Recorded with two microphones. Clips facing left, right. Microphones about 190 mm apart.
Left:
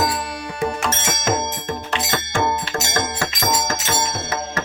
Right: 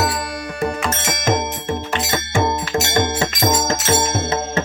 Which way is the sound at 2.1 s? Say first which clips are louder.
Right 2 dB; 15° right (ahead or behind).